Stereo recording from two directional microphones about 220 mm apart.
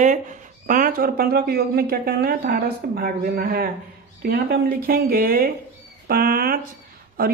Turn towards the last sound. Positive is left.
turn(degrees=-40)  # may be behind; listen again after turning